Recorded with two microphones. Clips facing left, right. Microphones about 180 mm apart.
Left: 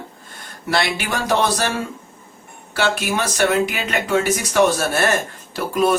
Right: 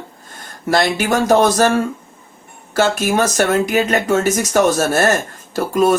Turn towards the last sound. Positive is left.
turn(degrees=-45)  # may be behind; listen again after turning